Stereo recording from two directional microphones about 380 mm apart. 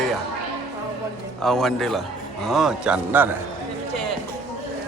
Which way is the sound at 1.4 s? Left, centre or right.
Centre.